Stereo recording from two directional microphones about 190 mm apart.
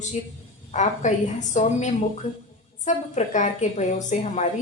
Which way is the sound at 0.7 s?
40° left (ahead or behind).